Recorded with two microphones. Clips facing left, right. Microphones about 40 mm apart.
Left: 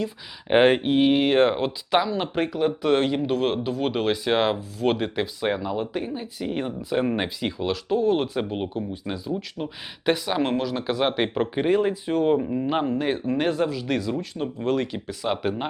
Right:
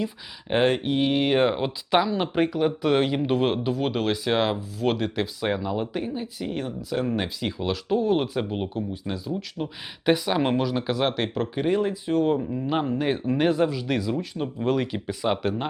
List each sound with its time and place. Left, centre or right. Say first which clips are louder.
0.4 s speech: left 4 dB; left; by 6.6 s centre
6.6 s speech: left 3 dB; left
7.4 s speech: left 1 dB; centre
11.1 s speech: left 3 dB; centre
12.8 s speech: left 1 dB; centre
15.4 s speech: even; centre